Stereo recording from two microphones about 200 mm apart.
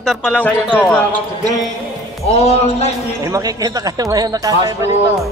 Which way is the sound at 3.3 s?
15° right (ahead or behind).